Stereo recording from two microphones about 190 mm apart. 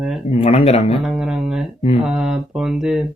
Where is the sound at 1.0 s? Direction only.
5° right (ahead or behind).